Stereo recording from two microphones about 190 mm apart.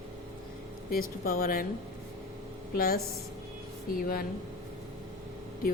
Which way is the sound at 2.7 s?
50° left (ahead or behind).